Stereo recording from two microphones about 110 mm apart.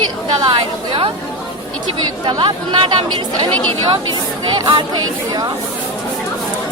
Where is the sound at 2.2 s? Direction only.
45° right (ahead or behind).